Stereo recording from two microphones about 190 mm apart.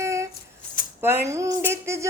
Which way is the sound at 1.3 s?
15° right (ahead or behind).